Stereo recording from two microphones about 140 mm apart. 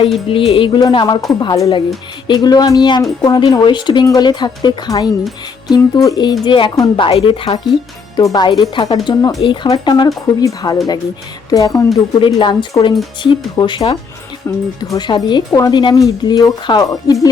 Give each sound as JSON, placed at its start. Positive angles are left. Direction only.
{"t": 0.0, "sound": "speech", "side_deg": 40}
{"t": 0.8, "sound": "speech", "side_deg": 30}
{"t": 6.9, "sound": "speech", "side_deg": 40}
{"t": 14.5, "sound": "speech", "side_deg": 20}
{"t": 14.9, "sound": "speech", "side_deg": 30}